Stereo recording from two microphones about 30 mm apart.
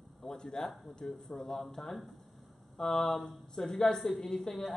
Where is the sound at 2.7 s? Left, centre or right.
Centre.